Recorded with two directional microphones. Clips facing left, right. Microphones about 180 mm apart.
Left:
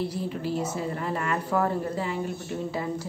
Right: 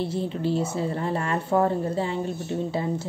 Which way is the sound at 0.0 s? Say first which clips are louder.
Right 3 dB; 25° right (ahead or behind).